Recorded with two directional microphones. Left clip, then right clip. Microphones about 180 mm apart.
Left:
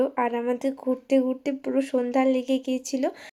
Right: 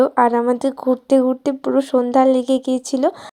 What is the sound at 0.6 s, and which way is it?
Speech, 30° right (ahead or behind).